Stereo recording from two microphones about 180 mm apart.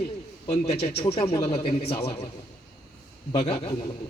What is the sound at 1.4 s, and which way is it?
Speech, 30° left (ahead or behind).